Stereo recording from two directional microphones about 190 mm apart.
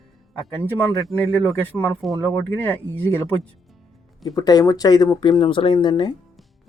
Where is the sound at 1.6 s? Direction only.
5° left (ahead or behind).